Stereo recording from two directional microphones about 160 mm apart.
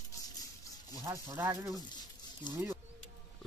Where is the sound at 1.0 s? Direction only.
20° right (ahead or behind).